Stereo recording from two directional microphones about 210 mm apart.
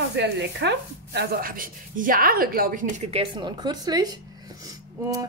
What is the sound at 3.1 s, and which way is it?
A woman's voice, 25° right (ahead or behind).